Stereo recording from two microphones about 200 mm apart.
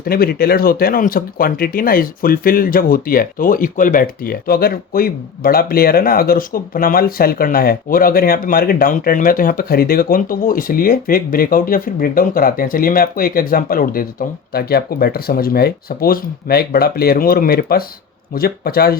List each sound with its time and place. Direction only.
0.0 s speech: 50° left (ahead or behind)